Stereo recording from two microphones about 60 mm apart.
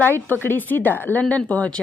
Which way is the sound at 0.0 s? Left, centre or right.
Left.